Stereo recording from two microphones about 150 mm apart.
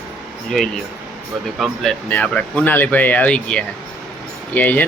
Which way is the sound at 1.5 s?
Centre (ahead or behind).